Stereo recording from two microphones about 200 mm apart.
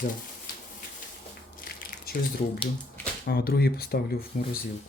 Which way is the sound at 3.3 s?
50° left (ahead or behind).